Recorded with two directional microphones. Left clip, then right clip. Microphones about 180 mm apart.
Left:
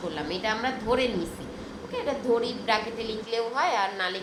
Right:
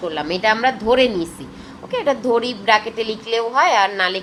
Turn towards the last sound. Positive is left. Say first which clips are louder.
# right 10 dB
turn(degrees=-60)  # may be behind; listen again after turning